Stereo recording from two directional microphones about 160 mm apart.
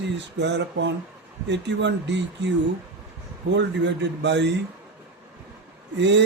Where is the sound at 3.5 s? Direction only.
90° right.